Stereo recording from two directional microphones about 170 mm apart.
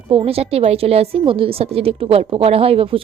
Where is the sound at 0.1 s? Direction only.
35° right (ahead or behind).